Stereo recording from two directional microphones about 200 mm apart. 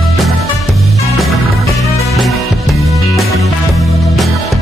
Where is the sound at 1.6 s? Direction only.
15° left (ahead or behind).